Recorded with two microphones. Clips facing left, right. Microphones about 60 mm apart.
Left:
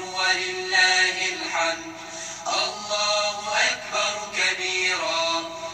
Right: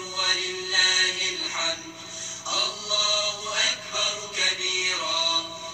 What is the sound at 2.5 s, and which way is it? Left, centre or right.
Synthetic singing, left.